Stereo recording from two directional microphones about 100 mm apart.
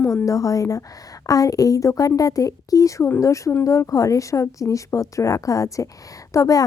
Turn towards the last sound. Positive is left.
turn(degrees=35)  # may be behind; listen again after turning